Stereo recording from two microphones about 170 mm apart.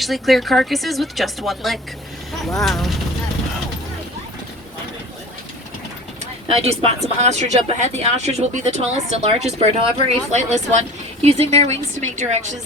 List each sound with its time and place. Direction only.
0.0 s speech: centre (ahead or behind)
6.5 s speech: 35° right (ahead or behind)